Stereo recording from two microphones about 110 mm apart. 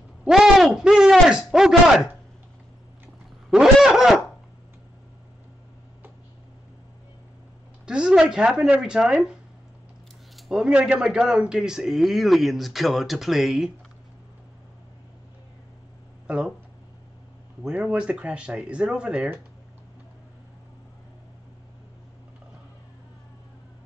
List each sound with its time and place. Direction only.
0.2 s speech: 5° right (ahead or behind)
3.4 s a man's voice: 5° right (ahead or behind)
7.8 s speech: 10° right (ahead or behind)
16.3 s speech: 10° right (ahead or behind)
17.6 s speech: 10° right (ahead or behind)